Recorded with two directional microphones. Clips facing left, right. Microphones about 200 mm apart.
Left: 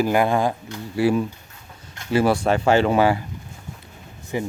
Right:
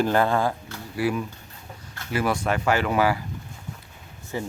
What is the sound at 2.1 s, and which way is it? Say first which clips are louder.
Speech: left 6 dB; 30° left (ahead or behind).